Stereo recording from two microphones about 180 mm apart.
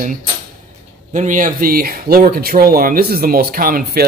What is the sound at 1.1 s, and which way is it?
Speech, 45° right (ahead or behind).